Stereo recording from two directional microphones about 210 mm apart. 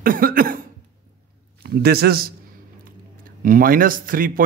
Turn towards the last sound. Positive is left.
turn(degrees=-40)  # may be behind; listen again after turning